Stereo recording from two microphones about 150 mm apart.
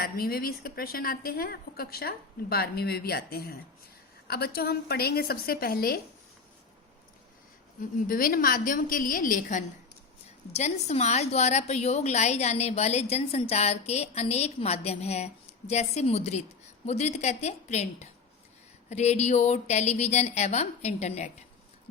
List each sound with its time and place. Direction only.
0.0 s a woman's voice: 90° left
7.8 s a woman's voice: 65° left (ahead or behind)
10.5 s a woman's voice: 45° left (ahead or behind)